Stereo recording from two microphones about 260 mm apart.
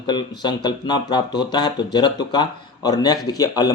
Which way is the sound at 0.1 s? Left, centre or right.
Centre.